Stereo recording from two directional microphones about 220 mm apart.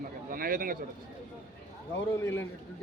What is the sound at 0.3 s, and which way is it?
Speech, 40° right (ahead or behind).